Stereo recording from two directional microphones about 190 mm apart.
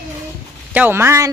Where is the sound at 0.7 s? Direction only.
10° right (ahead or behind).